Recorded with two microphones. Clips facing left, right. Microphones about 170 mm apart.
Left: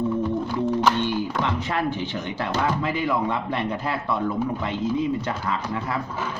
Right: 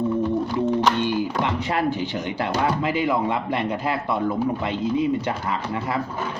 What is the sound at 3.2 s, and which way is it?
Speech, 15° right (ahead or behind).